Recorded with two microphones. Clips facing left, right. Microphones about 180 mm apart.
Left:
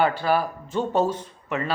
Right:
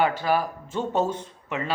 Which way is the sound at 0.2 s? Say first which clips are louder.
Left 1 dB; 15° right (ahead or behind).